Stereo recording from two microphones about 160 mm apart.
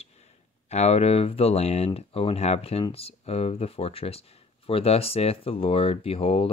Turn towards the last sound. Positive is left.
turn(degrees=35)  # may be behind; listen again after turning